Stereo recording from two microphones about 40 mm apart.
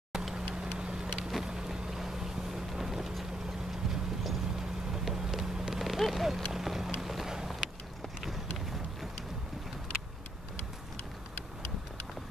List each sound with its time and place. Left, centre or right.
0.1 s vehicle: centre
1.3 s boat: centre
3.9 s vehicle: centre
7.0 s run: centre
7.2 s vehicle: centre
8.2 s run: centre